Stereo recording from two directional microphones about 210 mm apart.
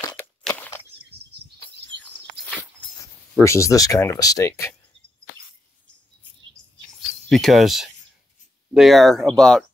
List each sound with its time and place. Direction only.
0.1 s crunch: 5° left (ahead or behind)
2.8 s a sound: 25° left (ahead or behind)
3.3 s speech: 15° left (ahead or behind)
7.2 s speech: centre (ahead or behind)